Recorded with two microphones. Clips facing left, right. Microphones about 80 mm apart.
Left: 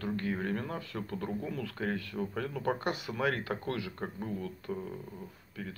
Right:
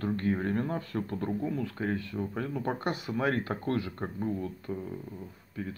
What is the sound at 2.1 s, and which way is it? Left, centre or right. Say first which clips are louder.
Speech: right 2 dB; centre.